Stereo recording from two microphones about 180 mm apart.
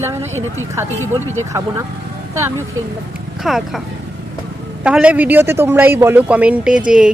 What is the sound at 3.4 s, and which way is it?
Speech, centre (ahead or behind).